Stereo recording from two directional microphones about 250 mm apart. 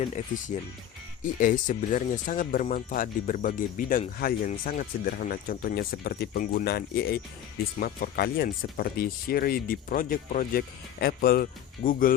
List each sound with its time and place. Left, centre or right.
0.1 s speech: left